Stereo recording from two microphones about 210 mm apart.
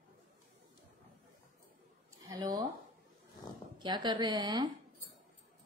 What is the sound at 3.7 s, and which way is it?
Speech, 20° right (ahead or behind).